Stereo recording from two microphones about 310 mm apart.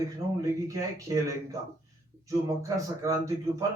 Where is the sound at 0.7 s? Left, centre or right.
Centre.